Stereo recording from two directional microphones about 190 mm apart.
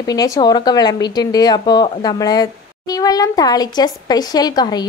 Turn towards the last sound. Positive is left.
turn(degrees=20)  # may be behind; listen again after turning